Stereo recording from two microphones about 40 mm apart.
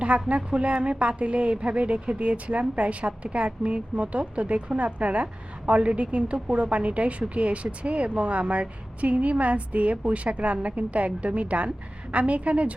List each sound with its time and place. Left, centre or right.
0.0 s a woman's voice: right